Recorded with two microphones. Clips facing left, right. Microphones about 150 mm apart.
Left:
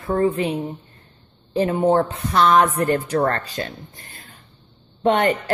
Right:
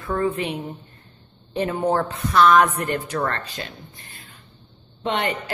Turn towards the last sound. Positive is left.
turn(degrees=45)  # may be behind; listen again after turning